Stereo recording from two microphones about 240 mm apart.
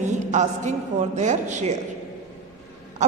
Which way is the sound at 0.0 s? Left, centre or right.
Right.